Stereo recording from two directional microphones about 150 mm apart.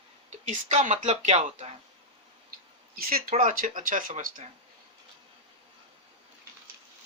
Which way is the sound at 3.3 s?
55° right (ahead or behind).